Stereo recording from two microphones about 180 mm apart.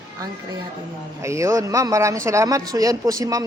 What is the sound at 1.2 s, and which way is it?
Speech, 15° right (ahead or behind).